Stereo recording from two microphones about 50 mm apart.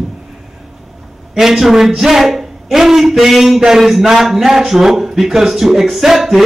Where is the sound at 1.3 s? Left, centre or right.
Centre.